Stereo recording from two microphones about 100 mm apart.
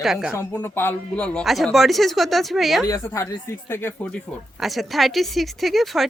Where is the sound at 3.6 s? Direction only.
25° left (ahead or behind).